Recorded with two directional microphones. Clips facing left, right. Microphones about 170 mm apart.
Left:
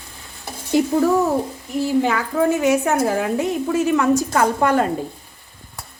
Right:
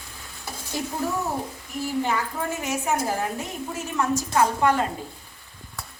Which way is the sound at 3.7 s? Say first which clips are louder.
Left 8 dB; 90° left.